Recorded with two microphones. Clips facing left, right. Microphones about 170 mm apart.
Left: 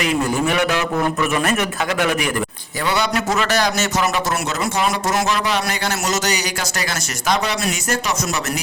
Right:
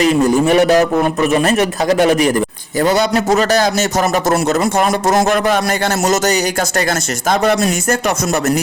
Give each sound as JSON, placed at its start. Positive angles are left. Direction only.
{"t": 0.0, "sound": "a man's voice", "side_deg": -35}